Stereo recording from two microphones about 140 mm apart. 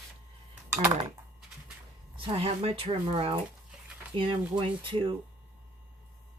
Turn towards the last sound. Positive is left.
turn(degrees=-35)  # may be behind; listen again after turning